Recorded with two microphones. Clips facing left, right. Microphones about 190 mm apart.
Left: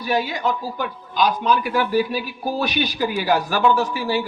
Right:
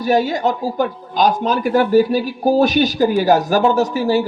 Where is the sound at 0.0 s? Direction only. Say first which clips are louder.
Right 6 dB; 45° right (ahead or behind).